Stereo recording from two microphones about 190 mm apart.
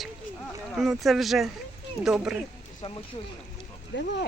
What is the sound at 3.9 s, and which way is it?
Speech, 70° left (ahead or behind).